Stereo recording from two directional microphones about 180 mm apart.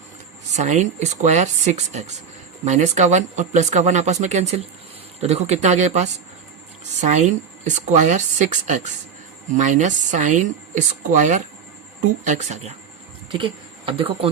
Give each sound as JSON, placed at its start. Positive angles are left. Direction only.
{"t": 0.5, "sound": "speech", "side_deg": -40}
{"t": 13.3, "sound": "speech", "side_deg": -30}